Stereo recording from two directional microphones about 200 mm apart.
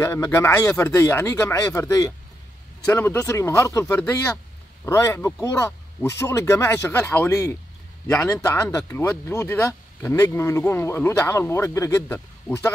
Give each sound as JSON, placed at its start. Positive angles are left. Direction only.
{"t": 0.0, "sound": "speech", "side_deg": 15}